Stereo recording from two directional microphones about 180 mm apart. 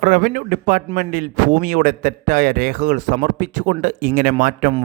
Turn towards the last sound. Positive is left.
turn(degrees=-50)  # may be behind; listen again after turning